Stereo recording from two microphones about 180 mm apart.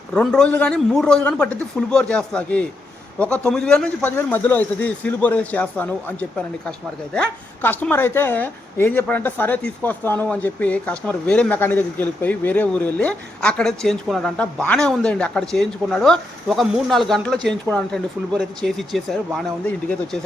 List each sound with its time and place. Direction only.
0.1 s a man's voice: 5° left (ahead or behind)